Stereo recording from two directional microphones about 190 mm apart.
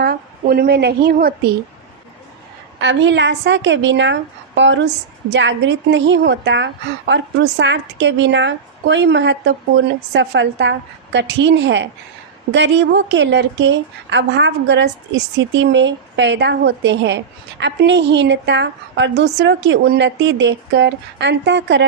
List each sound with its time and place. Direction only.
0.0 s a woman's voice: 55° right (ahead or behind)
2.8 s a woman's voice: 70° right (ahead or behind)